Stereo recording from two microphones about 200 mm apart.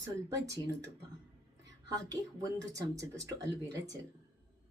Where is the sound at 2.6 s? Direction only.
15° right (ahead or behind).